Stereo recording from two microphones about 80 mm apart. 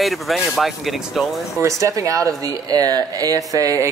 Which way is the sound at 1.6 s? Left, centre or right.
Right.